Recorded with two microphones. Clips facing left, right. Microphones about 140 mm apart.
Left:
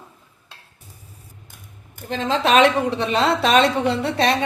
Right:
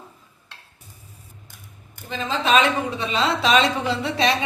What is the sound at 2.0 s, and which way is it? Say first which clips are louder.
A woman's voice: left 3 dB; 75° left (ahead or behind).